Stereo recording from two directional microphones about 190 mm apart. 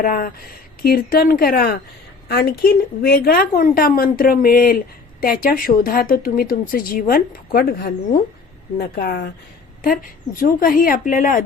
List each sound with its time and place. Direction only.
0.0 s a woman's voice: 50° left (ahead or behind)
10.4 s a woman's voice: 50° left (ahead or behind)